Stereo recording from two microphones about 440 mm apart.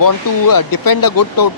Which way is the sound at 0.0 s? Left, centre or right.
Left.